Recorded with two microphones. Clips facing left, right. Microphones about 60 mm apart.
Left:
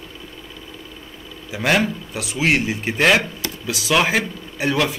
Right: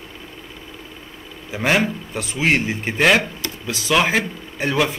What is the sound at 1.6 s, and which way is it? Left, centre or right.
Speech, centre.